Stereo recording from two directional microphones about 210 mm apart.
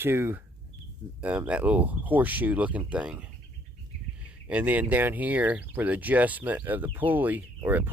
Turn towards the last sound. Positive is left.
turn(degrees=-10)  # may be behind; listen again after turning